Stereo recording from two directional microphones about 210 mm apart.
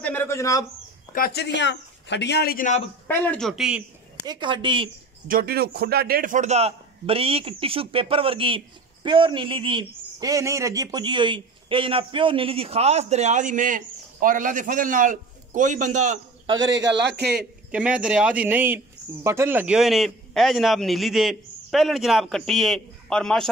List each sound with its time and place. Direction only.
0.0 s a man's voice: 10° left (ahead or behind)
1.1 s a man's voice: 45° left (ahead or behind)
3.1 s a man's voice: 5° left (ahead or behind)
4.3 s a man's voice: 20° right (ahead or behind)
5.3 s a man's voice: 45° right (ahead or behind)
16.5 s a man's voice: 60° right (ahead or behind)
17.3 s a man's voice: 5° right (ahead or behind)